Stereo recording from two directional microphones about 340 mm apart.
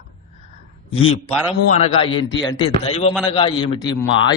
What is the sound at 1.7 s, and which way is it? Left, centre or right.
A man's voice, centre.